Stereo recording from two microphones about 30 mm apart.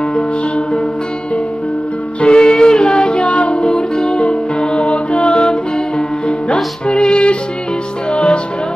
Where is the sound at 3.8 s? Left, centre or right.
Left.